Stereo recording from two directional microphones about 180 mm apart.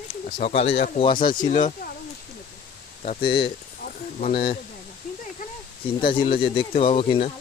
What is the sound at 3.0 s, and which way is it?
Speech, 30° left (ahead or behind).